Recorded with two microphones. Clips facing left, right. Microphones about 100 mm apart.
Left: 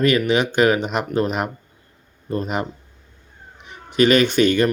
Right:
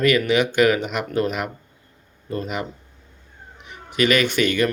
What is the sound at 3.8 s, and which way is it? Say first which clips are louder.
Speech: left 4 dB; 30° left (ahead or behind).